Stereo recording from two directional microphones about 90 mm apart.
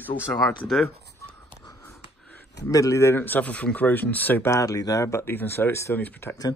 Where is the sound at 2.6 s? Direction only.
35° left (ahead or behind).